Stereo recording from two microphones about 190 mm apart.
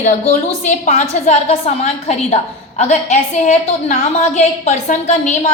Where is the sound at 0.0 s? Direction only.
35° left (ahead or behind).